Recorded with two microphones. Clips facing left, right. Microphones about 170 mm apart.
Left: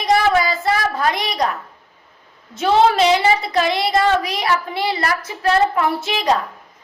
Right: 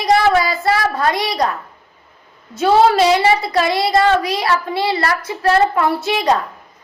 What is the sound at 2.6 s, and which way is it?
A woman's voice, 35° right (ahead or behind).